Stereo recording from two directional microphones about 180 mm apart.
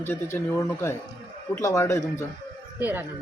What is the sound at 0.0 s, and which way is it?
Speech, 10° left (ahead or behind).